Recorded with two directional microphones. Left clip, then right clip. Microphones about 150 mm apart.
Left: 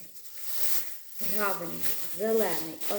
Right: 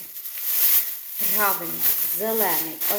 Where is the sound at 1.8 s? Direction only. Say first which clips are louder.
Right 4 dB; 10° left (ahead or behind).